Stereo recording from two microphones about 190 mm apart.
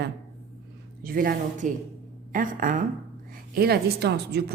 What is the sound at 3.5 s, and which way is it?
A woman's voice, 55° right (ahead or behind).